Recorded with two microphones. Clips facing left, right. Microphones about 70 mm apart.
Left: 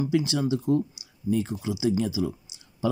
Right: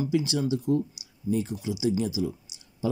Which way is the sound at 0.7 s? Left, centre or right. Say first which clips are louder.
Left 2 dB; right.